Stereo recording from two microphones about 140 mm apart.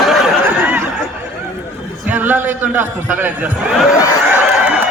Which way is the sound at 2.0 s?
15° right (ahead or behind).